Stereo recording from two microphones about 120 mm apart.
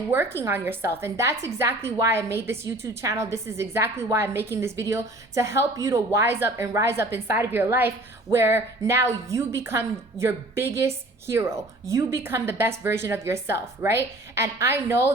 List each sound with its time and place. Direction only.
0.1 s a woman's voice: 20° right (ahead or behind)